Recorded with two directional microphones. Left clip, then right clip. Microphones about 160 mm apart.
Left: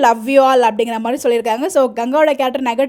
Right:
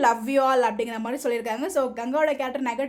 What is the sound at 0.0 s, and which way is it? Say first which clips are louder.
A woman's voice: left 9 dB; 40° left (ahead or behind).